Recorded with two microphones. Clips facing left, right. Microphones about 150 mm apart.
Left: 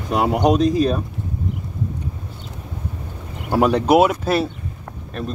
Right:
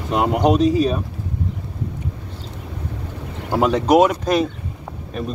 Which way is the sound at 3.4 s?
10° left (ahead or behind).